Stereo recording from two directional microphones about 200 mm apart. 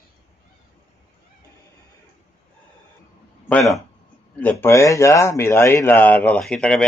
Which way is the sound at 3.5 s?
15° left (ahead or behind).